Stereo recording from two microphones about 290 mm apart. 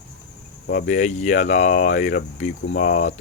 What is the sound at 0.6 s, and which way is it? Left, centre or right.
Speech, left.